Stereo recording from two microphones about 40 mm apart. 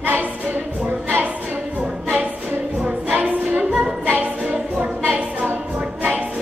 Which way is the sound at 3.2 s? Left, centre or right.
Right.